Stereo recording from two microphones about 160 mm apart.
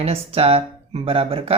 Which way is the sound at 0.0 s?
40° right (ahead or behind).